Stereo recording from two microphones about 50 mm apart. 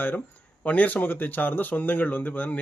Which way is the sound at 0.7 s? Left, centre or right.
Left.